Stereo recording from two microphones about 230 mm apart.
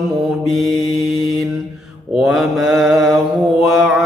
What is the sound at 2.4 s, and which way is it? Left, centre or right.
Mantra, centre.